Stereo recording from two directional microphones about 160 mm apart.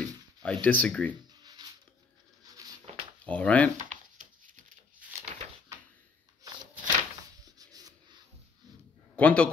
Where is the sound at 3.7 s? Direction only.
50° right (ahead or behind).